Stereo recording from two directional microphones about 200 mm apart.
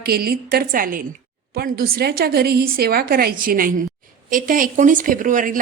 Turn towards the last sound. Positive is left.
turn(degrees=-40)  # may be behind; listen again after turning